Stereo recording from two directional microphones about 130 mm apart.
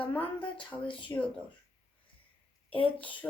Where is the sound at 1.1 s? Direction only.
25° left (ahead or behind).